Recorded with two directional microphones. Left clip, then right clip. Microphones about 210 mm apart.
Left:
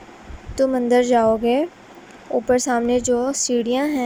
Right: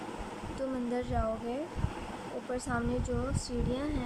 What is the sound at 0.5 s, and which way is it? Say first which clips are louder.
Speech: left 19 dB; 35° left (ahead or behind).